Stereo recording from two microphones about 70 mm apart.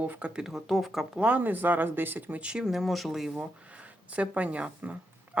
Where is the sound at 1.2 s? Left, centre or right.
Right.